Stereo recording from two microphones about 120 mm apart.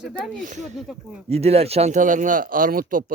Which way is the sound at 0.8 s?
5° right (ahead or behind).